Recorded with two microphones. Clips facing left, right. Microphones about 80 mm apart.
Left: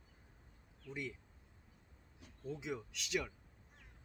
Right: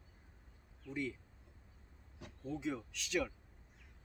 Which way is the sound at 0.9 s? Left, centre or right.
Centre.